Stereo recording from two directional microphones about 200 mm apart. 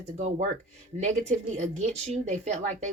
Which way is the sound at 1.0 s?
35° right (ahead or behind).